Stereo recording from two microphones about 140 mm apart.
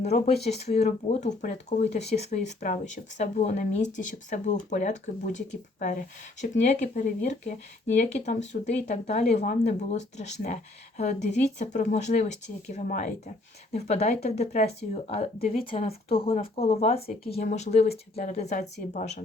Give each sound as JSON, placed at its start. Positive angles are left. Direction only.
{"t": 0.0, "sound": "speech", "side_deg": 50}
{"t": 1.1, "sound": "speech", "side_deg": 60}
{"t": 6.4, "sound": "speech", "side_deg": 55}